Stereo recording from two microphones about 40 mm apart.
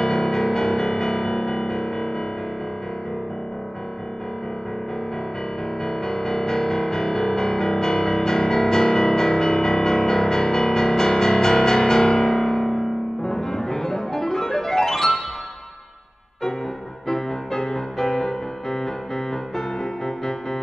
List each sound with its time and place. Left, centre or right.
0.0 s music: centre
5.9 s music: centre
17.1 s music: centre